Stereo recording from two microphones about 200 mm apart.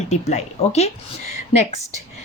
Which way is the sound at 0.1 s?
35° left (ahead or behind).